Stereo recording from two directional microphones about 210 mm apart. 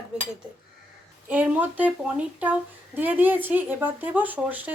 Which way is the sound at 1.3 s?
5° right (ahead or behind).